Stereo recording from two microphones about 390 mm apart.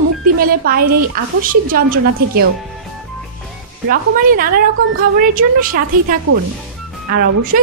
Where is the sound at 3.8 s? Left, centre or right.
Right.